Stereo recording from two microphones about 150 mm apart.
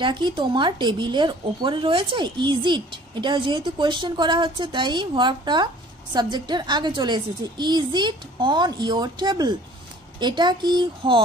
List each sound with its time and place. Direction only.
0.0 s a woman's voice: 30° right (ahead or behind)